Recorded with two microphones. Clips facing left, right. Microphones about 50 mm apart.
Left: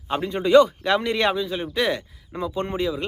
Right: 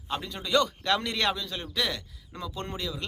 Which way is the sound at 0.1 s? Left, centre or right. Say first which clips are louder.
Left 11 dB; left.